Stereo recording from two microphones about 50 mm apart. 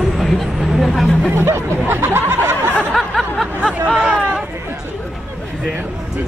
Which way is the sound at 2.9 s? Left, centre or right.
Centre.